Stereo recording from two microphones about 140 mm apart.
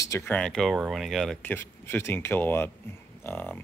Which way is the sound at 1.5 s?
15° left (ahead or behind).